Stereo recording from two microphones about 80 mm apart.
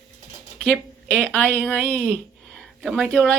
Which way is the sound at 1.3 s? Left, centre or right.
Centre.